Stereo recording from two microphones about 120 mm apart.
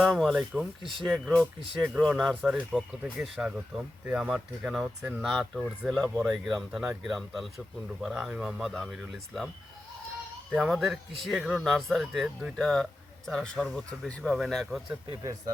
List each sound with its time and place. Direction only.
0.0 s speech: centre (ahead or behind)
1.9 s speech: 5° right (ahead or behind)
10.5 s speech: centre (ahead or behind)